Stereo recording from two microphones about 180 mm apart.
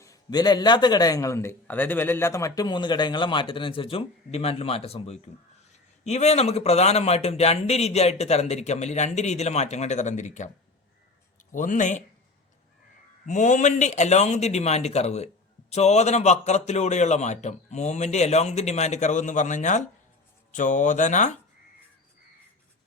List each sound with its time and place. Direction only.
0.0 s a man's voice: 20° left (ahead or behind); by 10.5 s 40° left (ahead or behind)
11.5 s speech: 45° left (ahead or behind)
13.2 s a man's voice: 45° left (ahead or behind)